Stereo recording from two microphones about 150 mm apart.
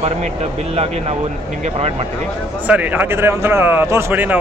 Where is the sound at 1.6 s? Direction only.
45° right (ahead or behind).